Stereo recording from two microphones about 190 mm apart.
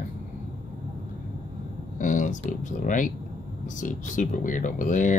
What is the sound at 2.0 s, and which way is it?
Speech, 45° left (ahead or behind).